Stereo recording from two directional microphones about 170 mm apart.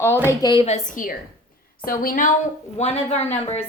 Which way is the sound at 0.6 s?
45° left (ahead or behind).